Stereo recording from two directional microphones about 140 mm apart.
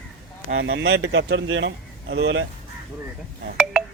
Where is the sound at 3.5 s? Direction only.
5° right (ahead or behind).